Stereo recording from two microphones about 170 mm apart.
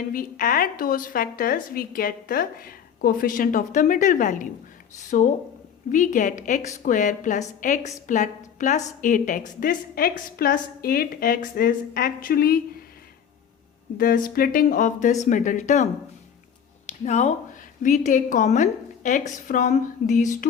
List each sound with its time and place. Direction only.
0.1 s a woman's voice: 55° left (ahead or behind)
14.0 s a woman's voice: 60° left (ahead or behind)
17.1 s a woman's voice: 40° left (ahead or behind)